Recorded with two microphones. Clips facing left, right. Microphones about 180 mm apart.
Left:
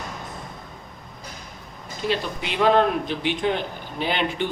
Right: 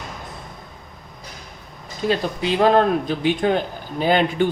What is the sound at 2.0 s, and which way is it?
Speech, 40° right (ahead or behind).